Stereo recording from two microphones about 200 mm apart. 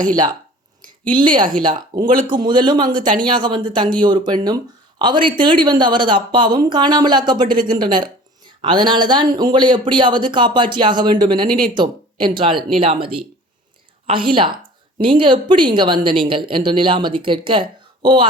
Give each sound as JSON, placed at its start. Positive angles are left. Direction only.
{"t": 1.1, "sound": "speech", "side_deg": -25}